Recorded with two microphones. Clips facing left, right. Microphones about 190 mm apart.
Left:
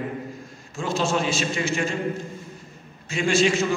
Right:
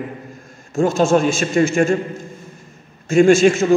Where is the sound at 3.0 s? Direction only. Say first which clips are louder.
Right 10 dB; 45° right (ahead or behind).